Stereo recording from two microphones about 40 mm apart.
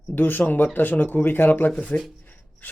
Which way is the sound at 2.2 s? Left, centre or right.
Left.